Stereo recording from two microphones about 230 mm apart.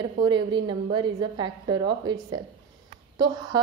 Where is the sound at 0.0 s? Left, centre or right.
Centre.